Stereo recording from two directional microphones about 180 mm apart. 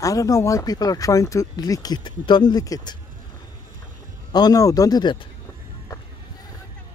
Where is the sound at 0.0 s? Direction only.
20° left (ahead or behind).